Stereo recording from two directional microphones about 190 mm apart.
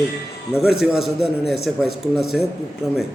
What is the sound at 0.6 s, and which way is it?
A man's voice, centre (ahead or behind).